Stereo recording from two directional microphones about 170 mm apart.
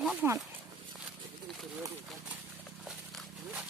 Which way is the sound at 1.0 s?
Centre (ahead or behind).